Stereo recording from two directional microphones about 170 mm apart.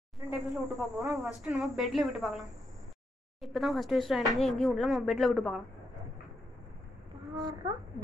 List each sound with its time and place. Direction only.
0.3 s speech: centre (ahead or behind)
7.3 s a child's voice: 25° right (ahead or behind)